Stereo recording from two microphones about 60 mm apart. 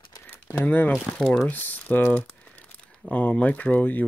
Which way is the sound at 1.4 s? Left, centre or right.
Left.